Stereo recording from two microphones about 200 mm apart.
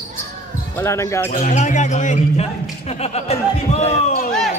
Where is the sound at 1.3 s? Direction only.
35° left (ahead or behind).